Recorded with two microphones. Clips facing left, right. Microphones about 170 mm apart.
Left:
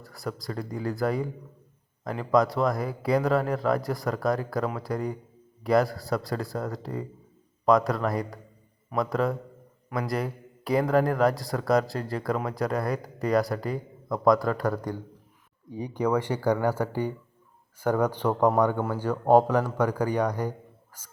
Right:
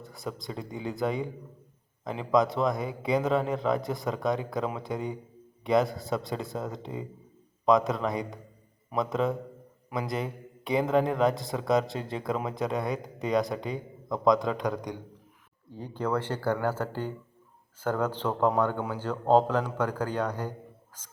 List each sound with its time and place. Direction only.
0.0 s speech: centre (ahead or behind)
5.6 s speech: centre (ahead or behind)
14.3 s a man's voice: 20° right (ahead or behind)
14.7 s speech: 5° left (ahead or behind)